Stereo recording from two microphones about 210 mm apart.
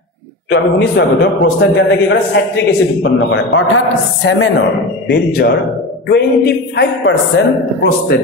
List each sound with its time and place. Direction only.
0.5 s a man's voice: 50° left (ahead or behind)